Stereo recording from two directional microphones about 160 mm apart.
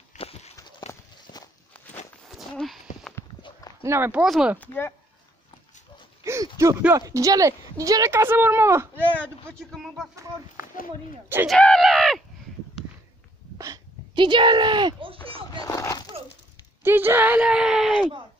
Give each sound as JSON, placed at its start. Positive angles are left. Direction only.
{"t": 0.2, "sound": "a sound", "side_deg": 40}
{"t": 0.6, "sound": "horse", "side_deg": 25}
{"t": 1.1, "sound": "walk", "side_deg": 25}
{"t": 2.2, "sound": "a sound", "side_deg": 0}
{"t": 3.8, "sound": "speech", "side_deg": -15}
{"t": 4.6, "sound": "speech", "side_deg": 15}
{"t": 6.2, "sound": "a sound", "side_deg": -20}
{"t": 7.0, "sound": "speech", "side_deg": -20}
{"t": 9.5, "sound": "speech", "side_deg": 0}
{"t": 11.4, "sound": "speech", "side_deg": 5}
{"t": 13.6, "sound": "speech", "side_deg": -25}
{"t": 15.5, "sound": "a sound", "side_deg": 20}
{"t": 16.8, "sound": "speech", "side_deg": -15}